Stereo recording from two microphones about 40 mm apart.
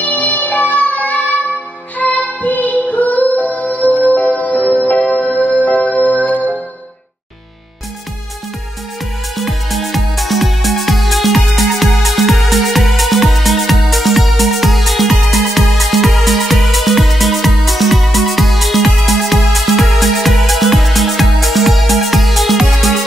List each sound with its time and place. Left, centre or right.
0.0 s music: left
9.4 s music: centre